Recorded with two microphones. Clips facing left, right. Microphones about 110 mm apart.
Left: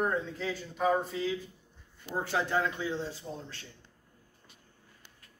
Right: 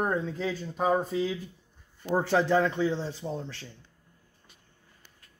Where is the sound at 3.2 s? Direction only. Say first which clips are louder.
Right 7 dB; 55° right (ahead or behind).